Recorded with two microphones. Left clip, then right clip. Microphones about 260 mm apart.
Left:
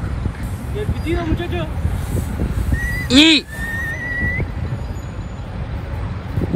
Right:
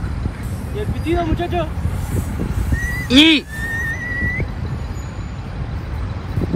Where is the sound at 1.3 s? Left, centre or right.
Right.